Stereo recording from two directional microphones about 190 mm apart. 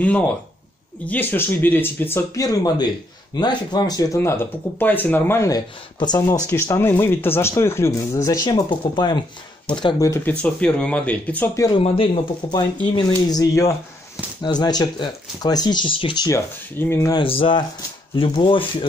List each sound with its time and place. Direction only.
1.0 s speech: 10° left (ahead or behind)
11.8 s speech: 30° left (ahead or behind)
17.2 s speech: 30° left (ahead or behind)